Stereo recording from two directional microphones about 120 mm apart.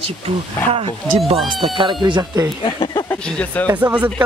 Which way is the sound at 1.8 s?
40° right (ahead or behind).